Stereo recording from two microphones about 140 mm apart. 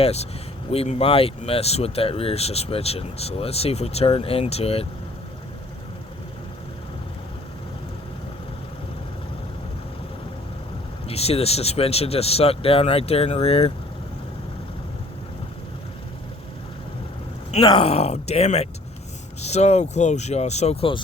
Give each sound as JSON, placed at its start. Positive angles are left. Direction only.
{"t": 0.0, "sound": "speech", "side_deg": 50}
{"t": 11.1, "sound": "speech", "side_deg": 45}
{"t": 17.6, "sound": "speech", "side_deg": 40}